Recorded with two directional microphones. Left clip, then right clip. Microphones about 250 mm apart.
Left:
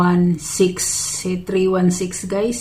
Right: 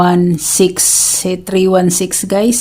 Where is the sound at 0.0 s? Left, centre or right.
Right.